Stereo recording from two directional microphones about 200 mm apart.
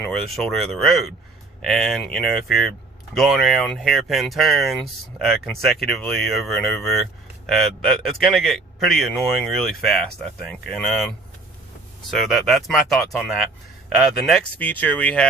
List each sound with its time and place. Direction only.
0.0 s speech: centre (ahead or behind)
12.1 s speech: centre (ahead or behind)